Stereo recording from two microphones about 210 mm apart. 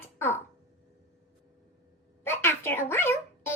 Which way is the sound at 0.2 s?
10° left (ahead or behind).